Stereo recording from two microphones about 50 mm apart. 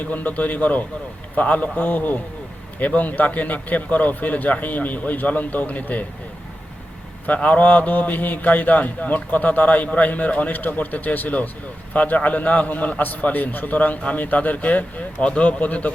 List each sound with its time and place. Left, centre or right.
0.0 s a man's voice: left
7.3 s a man's voice: left